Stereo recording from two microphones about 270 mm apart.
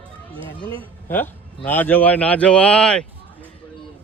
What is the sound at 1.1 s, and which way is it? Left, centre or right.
A man's voice, centre.